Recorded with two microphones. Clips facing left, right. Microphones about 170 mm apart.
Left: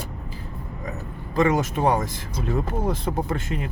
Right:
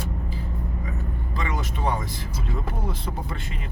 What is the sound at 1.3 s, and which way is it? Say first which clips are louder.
Speech: left 11 dB; 45° left (ahead or behind).